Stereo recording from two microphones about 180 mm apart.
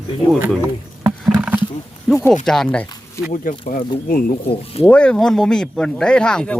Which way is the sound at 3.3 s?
50° left (ahead or behind).